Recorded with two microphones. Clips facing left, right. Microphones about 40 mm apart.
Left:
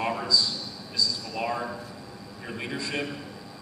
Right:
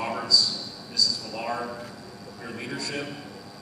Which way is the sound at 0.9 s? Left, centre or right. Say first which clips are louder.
Even; left.